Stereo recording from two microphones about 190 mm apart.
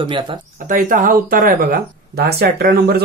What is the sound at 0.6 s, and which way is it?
Speech, 45° right (ahead or behind).